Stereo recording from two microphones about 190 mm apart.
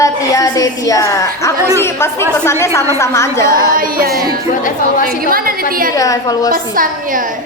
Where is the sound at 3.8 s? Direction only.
50° right (ahead or behind).